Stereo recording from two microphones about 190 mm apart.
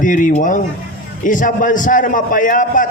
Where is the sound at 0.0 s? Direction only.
45° left (ahead or behind).